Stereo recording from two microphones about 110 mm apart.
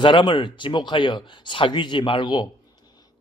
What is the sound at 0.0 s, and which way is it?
A man's voice, 50° left (ahead or behind).